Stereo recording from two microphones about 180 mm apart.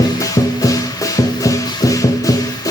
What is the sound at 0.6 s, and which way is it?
Music, 20° left (ahead or behind).